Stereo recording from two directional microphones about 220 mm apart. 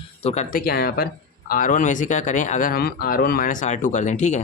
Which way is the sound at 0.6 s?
45° left (ahead or behind).